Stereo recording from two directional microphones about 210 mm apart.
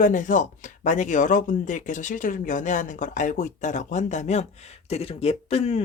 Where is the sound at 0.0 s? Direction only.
40° left (ahead or behind).